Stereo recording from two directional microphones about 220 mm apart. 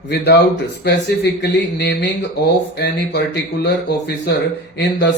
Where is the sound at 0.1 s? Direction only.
50° left (ahead or behind).